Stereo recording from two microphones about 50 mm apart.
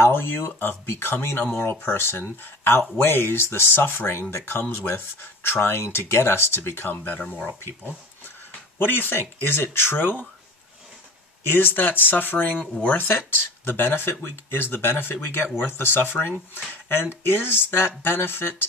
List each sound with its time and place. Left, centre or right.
0.0 s speech: left
7.1 s speech: left
8.7 s speech: left
11.5 s speech: left